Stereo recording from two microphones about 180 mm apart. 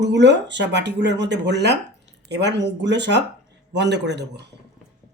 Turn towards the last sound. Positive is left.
turn(degrees=-70)  # may be behind; listen again after turning